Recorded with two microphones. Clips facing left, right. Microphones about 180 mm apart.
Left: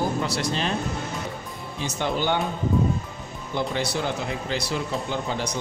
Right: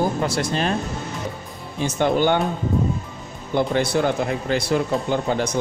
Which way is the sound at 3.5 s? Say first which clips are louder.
Right 7 dB; 55° right (ahead or behind).